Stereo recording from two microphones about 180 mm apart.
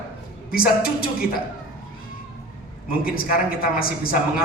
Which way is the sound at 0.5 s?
55° left (ahead or behind).